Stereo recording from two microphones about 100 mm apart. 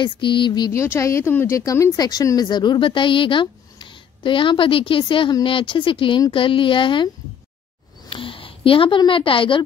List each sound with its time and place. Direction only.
0.0 s a sound: 55° left (ahead or behind)
0.7 s speech: 30° left (ahead or behind); by 7.1 s 55° left (ahead or behind)
8.1 s a woman's voice: 65° left (ahead or behind)